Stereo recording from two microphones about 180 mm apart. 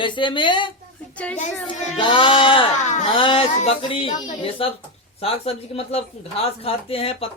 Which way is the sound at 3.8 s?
30° left (ahead or behind).